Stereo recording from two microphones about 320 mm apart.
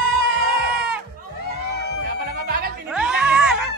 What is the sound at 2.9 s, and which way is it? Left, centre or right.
Music, centre.